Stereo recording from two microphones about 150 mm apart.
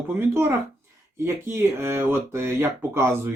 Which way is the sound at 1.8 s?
15° right (ahead or behind).